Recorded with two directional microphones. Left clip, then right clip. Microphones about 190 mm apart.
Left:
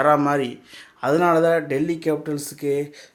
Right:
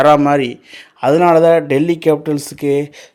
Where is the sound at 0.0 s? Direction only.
35° right (ahead or behind).